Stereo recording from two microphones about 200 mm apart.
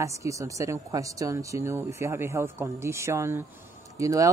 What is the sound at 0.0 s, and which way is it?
Speech, 15° right (ahead or behind).